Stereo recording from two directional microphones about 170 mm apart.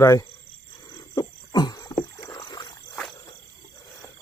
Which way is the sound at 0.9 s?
20° left (ahead or behind).